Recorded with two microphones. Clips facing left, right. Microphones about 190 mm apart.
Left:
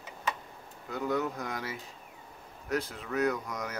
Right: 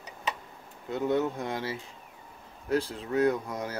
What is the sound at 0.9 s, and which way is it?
Speech, 25° right (ahead or behind).